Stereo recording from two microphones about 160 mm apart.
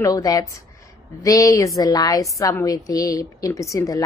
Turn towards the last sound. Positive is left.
turn(degrees=20)  # may be behind; listen again after turning